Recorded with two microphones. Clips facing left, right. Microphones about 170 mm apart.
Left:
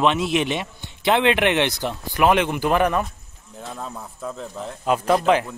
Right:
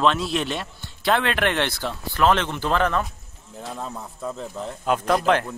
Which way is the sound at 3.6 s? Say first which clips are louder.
Right 1 dB; centre (ahead or behind).